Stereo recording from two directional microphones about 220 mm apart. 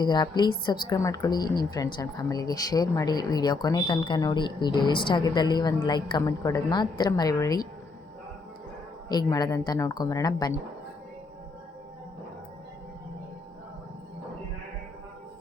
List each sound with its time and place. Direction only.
0.0 s a woman's voice: 20° left (ahead or behind)
9.0 s speech: 20° left (ahead or behind)